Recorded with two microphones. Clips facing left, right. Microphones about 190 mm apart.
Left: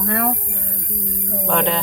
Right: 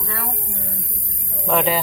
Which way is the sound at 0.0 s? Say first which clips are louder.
Left 10 dB; 55° left (ahead or behind).